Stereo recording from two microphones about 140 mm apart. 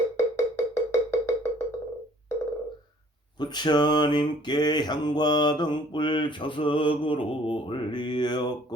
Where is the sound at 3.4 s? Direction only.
30° left (ahead or behind).